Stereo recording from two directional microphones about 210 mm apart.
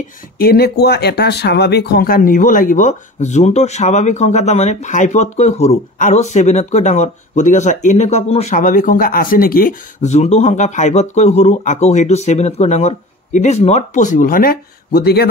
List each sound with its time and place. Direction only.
0.4 s speech: 45° left (ahead or behind)